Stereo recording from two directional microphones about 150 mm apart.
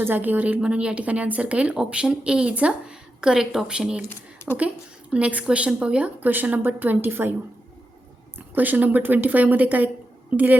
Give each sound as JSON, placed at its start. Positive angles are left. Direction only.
{"t": 0.0, "sound": "a woman's voice", "side_deg": -15}
{"t": 5.1, "sound": "a woman's voice", "side_deg": -10}
{"t": 8.4, "sound": "a woman's voice", "side_deg": -10}